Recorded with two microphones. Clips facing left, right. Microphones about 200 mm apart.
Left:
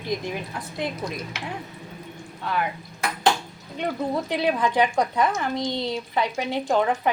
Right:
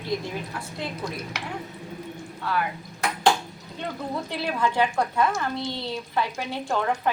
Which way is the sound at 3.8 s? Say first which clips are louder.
Left 5 dB; 15° left (ahead or behind).